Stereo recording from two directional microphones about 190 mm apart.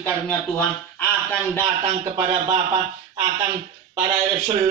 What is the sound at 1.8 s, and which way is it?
Speech, 35° right (ahead or behind).